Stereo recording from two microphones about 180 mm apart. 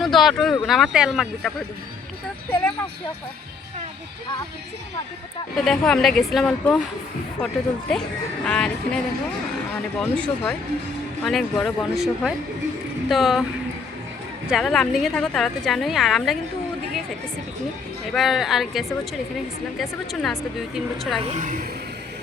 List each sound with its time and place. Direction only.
0.0 s a woman's voice: centre (ahead or behind)
5.6 s a woman's voice: centre (ahead or behind)
10.0 s a woman's voice: 10° left (ahead or behind)
14.4 s a woman's voice: centre (ahead or behind)
18.1 s a woman's voice: centre (ahead or behind)
21.3 s speech: 45° right (ahead or behind)